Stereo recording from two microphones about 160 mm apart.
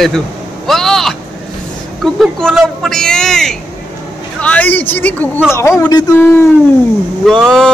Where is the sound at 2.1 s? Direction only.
Centre (ahead or behind); by 6.5 s 25° left (ahead or behind).